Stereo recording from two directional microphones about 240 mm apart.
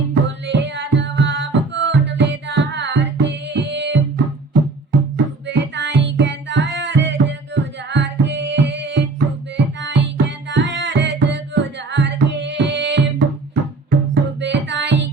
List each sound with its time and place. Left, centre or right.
0.1 s music: right
5.1 s music: right